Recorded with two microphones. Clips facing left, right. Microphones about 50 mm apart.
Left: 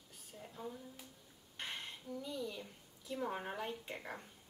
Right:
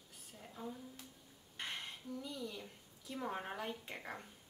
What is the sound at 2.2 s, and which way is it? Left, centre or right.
Speech, centre.